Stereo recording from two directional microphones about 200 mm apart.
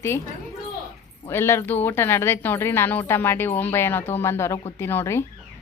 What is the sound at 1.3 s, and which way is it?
Speech, 10° left (ahead or behind).